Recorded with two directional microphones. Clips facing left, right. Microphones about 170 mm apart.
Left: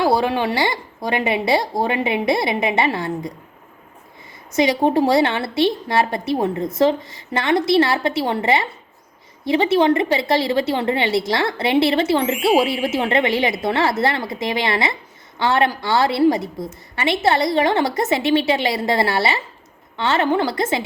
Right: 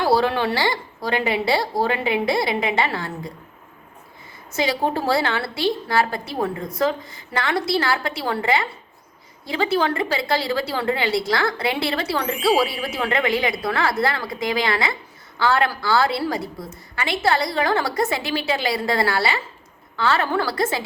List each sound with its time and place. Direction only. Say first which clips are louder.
0.0 s a woman's voice: left 1 dB; 15° left (ahead or behind)
4.5 s a woman's voice: left 6 dB; 20° left (ahead or behind)